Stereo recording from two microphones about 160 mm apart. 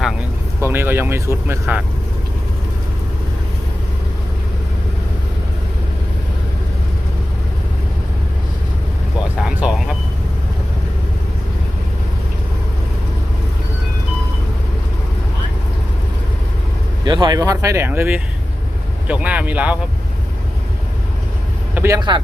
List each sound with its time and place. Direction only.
0.6 s speech: 15° right (ahead or behind)
9.4 s a sound: 5° right (ahead or behind)
17.0 s speech: 30° right (ahead or behind); by 19.8 s 10° right (ahead or behind)
21.8 s speech: 20° right (ahead or behind)